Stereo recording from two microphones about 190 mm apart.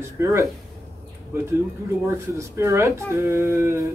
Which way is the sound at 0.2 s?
15° right (ahead or behind).